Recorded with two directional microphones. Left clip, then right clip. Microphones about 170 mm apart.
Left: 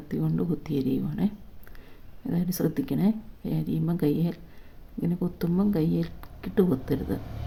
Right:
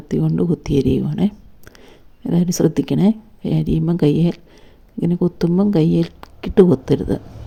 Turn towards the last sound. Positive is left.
turn(degrees=-40)  # may be behind; listen again after turning